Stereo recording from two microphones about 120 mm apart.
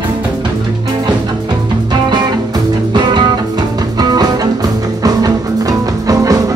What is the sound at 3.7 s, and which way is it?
Music, 35° right (ahead or behind).